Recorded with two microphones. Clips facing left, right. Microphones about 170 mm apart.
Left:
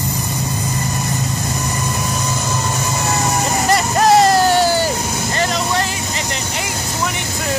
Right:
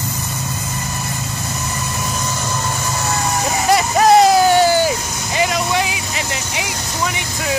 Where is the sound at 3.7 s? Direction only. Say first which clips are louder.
Right 2 dB; centre (ahead or behind).